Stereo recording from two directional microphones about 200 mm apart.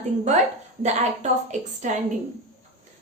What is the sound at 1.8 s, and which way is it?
Speech, 35° right (ahead or behind).